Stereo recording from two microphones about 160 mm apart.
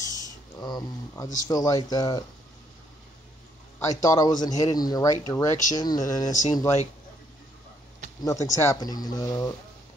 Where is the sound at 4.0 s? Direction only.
20° left (ahead or behind).